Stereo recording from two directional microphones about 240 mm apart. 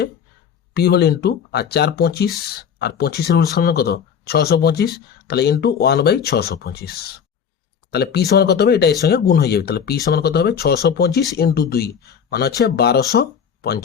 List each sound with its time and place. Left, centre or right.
0.7 s speech: left